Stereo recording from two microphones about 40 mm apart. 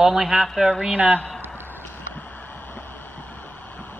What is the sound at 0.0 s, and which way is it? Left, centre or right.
Speech, centre.